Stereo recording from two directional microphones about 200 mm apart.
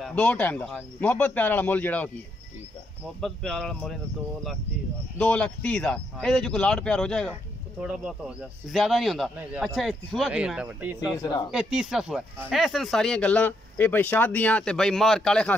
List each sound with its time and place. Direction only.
0.0 s speech: 5° left (ahead or behind)
3.2 s speech: centre (ahead or behind)
5.2 s speech: 5° left (ahead or behind)
11.2 s speech: 20° left (ahead or behind)
11.5 s speech: 5° right (ahead or behind)